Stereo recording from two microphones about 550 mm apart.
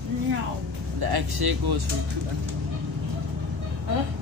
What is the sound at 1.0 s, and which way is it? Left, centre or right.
Speech, right.